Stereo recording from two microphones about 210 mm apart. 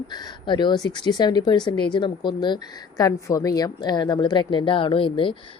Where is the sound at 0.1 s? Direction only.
20° left (ahead or behind).